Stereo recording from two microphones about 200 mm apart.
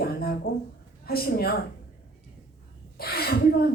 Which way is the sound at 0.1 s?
50° left (ahead or behind).